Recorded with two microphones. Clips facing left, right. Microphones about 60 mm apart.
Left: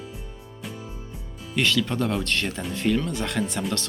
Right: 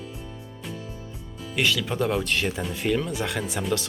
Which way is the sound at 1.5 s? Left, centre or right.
Centre.